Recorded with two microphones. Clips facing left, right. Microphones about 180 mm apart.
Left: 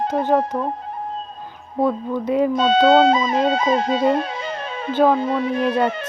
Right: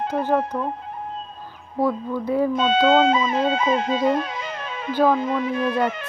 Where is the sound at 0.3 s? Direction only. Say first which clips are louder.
Left 3 dB; 35° left (ahead or behind).